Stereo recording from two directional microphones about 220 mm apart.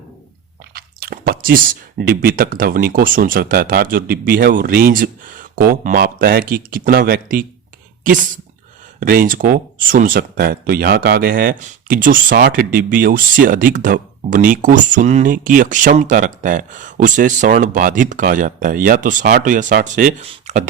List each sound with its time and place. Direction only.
0.7 s speech: 45° right (ahead or behind)